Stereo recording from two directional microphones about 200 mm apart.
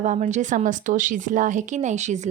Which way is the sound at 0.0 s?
35° right (ahead or behind).